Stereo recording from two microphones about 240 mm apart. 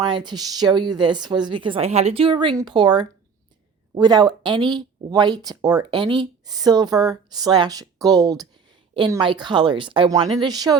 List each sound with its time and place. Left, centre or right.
0.0 s a woman's voice: centre